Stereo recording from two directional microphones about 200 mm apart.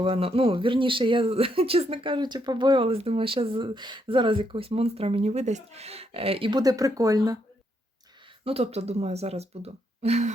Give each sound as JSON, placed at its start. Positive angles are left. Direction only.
{"t": 0.0, "sound": "speech", "side_deg": -30}
{"t": 8.4, "sound": "speech", "side_deg": -30}